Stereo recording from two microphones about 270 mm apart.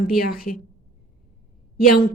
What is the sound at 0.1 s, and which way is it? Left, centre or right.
Speech, left.